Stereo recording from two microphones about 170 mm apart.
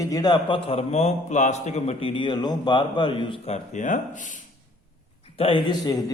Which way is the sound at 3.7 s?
50° left (ahead or behind).